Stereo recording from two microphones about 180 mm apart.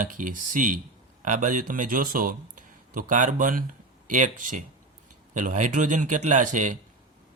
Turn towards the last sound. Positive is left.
turn(degrees=-45)  # may be behind; listen again after turning